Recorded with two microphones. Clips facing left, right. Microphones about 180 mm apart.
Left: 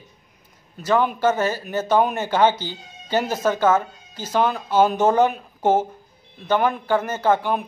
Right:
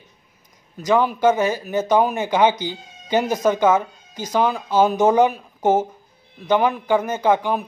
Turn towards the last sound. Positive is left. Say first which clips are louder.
# right 1 dB
turn(degrees=-15)  # may be behind; listen again after turning